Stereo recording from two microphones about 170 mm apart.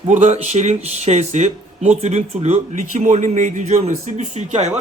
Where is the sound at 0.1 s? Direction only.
40° right (ahead or behind).